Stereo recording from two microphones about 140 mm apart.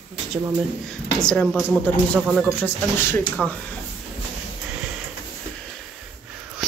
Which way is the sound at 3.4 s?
10° right (ahead or behind).